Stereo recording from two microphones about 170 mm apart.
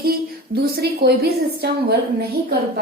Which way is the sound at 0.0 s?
65° right (ahead or behind).